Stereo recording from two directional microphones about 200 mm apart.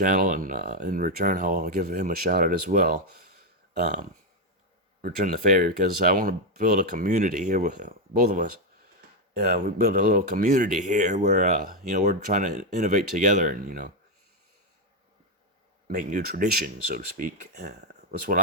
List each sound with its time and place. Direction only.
0.0 s speech: 40° right (ahead or behind)
5.0 s speech: 45° right (ahead or behind)
15.9 s speech: 45° right (ahead or behind)